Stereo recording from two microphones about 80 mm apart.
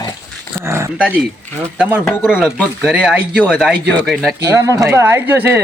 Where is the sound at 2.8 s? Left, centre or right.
Centre.